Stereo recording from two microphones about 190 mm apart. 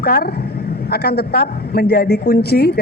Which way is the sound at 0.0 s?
55° left (ahead or behind).